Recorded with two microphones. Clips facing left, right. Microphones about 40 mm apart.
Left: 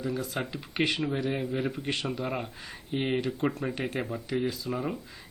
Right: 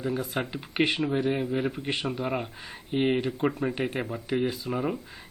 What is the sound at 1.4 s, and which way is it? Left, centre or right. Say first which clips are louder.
Speech: right 3 dB; centre.